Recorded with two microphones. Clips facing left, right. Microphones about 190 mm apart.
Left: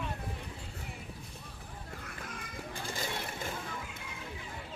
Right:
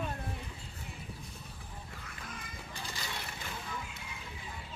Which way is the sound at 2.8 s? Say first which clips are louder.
Left 5 dB; 50° left (ahead or behind).